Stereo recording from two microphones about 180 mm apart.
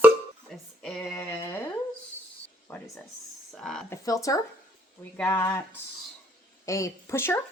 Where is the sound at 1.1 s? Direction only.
15° left (ahead or behind).